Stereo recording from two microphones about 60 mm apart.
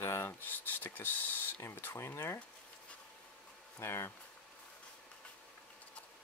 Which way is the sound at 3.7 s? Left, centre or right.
Left.